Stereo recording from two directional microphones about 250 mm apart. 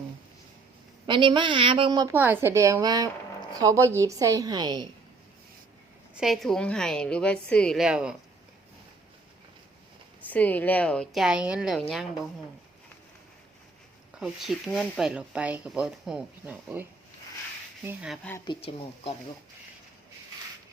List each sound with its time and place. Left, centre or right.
1.0 s a woman's voice: centre
6.1 s speech: centre
10.2 s speech: centre
14.2 s speech: centre
17.8 s speech: centre
18.4 s speech: left